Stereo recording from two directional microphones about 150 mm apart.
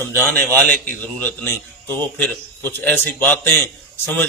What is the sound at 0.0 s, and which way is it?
A man's voice, 10° left (ahead or behind).